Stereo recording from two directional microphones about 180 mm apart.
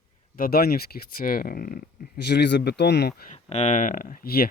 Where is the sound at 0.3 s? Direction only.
55° left (ahead or behind).